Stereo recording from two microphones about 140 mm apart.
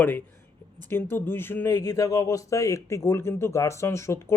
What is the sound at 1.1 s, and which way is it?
Speech, 15° left (ahead or behind).